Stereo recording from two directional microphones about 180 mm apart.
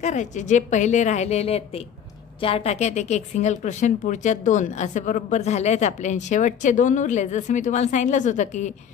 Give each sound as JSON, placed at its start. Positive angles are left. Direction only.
{"t": 0.0, "sound": "speech", "side_deg": 40}